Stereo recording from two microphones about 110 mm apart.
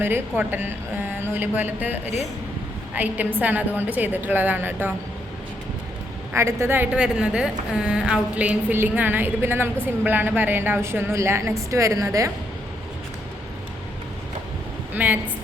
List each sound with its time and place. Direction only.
0.0 s a woman's voice: 20° right (ahead or behind)
2.0 s speech: 90° left
2.9 s a woman's voice: 15° right (ahead or behind)
6.3 s a woman's voice: 25° right (ahead or behind)
6.9 s a woman's voice: 10° right (ahead or behind); by 12.3 s 30° right (ahead or behind)
14.9 s a woman's voice: 15° right (ahead or behind)